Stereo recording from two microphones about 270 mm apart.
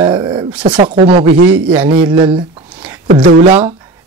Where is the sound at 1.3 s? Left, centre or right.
Right.